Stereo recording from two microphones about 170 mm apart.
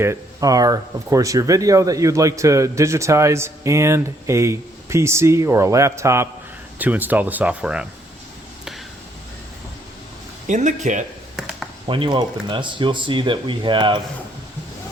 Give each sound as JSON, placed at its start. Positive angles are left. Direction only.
{"t": 0.0, "sound": "speech", "side_deg": -15}
{"t": 10.4, "sound": "speech", "side_deg": -45}
{"t": 11.3, "sound": "a sound", "side_deg": 0}
{"t": 11.9, "sound": "speech", "side_deg": -30}